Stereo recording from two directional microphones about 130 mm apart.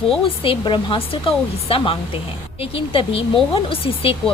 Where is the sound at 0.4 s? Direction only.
40° left (ahead or behind).